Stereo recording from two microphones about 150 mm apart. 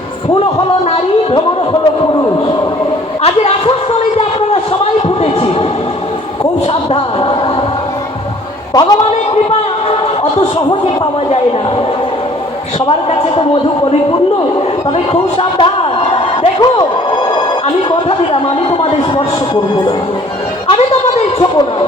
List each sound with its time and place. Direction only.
0.9 s speech: 40° left (ahead or behind)
3.2 s a woman's voice: 40° left (ahead or behind)
4.2 s a sound: 40° left (ahead or behind)
6.9 s speech: 35° left (ahead or behind)
8.7 s a man's voice: 25° left (ahead or behind)
9.0 s a sound: 45° left (ahead or behind)
15.1 s a sound: 35° left (ahead or behind)
17.8 s speech: 35° left (ahead or behind)
20.7 s speech: 40° left (ahead or behind)